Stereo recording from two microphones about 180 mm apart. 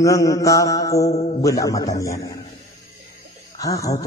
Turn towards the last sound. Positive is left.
turn(degrees=20)  # may be behind; listen again after turning